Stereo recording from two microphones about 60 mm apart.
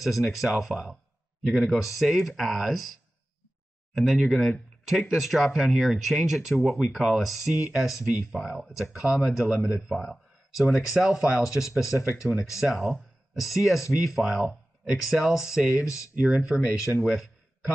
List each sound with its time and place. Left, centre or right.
0.0 s speech: centre
3.9 s speech: centre
7.5 s speech: centre